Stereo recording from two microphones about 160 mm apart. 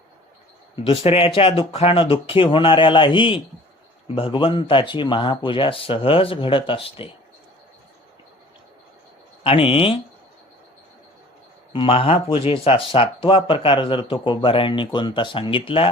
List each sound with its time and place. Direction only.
0.9 s speech: 35° left (ahead or behind)
9.4 s speech: 35° left (ahead or behind)
11.7 s speech: 35° left (ahead or behind)